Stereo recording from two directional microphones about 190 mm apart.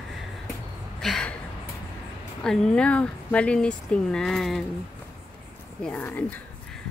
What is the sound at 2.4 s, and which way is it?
Speech, 5° left (ahead or behind).